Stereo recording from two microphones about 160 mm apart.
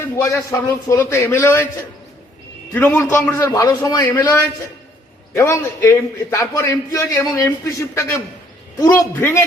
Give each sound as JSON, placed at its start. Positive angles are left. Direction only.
{"t": 0.0, "sound": "a man's voice", "side_deg": 20}
{"t": 2.7, "sound": "a man's voice", "side_deg": 15}